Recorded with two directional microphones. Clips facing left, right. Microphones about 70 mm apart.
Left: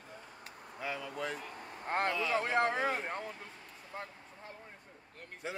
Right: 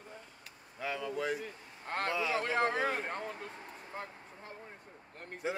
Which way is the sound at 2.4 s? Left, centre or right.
Centre.